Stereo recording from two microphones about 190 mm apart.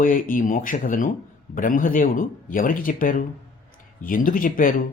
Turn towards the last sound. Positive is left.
turn(degrees=45)  # may be behind; listen again after turning